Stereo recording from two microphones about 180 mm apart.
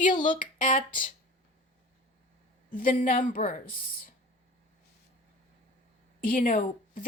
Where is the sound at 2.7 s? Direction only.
50° left (ahead or behind).